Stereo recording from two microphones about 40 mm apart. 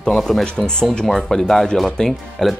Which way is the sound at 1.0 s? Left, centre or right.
Centre.